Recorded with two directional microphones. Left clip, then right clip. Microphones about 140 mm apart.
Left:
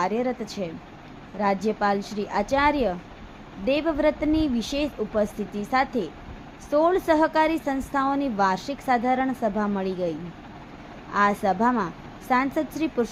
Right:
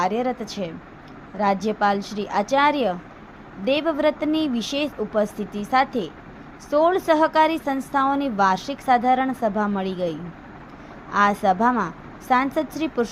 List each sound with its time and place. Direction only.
0.0 s a woman's voice: 15° right (ahead or behind)